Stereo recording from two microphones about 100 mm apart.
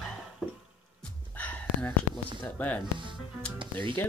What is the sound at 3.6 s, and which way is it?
Speech, 55° right (ahead or behind).